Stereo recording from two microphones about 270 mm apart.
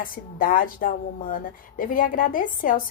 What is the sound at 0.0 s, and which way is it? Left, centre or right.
A woman's voice, left.